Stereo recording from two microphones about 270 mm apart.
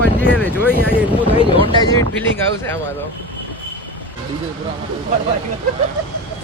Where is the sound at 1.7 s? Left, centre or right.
Centre.